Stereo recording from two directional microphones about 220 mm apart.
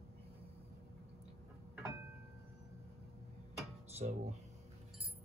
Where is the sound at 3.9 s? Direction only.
30° right (ahead or behind).